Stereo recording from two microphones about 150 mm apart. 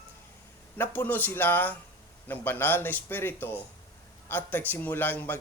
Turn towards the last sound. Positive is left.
turn(degrees=10)  # may be behind; listen again after turning